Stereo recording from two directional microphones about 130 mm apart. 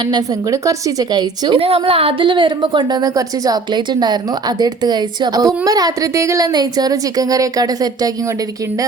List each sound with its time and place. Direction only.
0.0 s a woman's voice: 30° right (ahead or behind)
1.5 s a woman's voice: 45° right (ahead or behind); by 8.1 s 30° right (ahead or behind)